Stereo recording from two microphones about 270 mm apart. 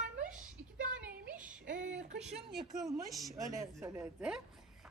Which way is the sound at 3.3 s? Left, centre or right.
Centre.